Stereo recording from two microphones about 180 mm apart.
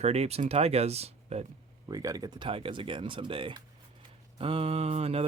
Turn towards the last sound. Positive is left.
turn(degrees=-35)  # may be behind; listen again after turning